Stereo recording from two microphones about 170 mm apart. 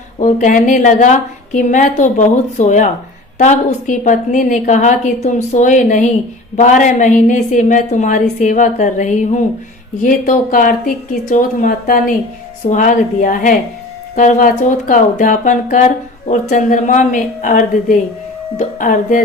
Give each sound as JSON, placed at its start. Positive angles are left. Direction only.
{"t": 0.2, "sound": "a woman's voice", "side_deg": 50}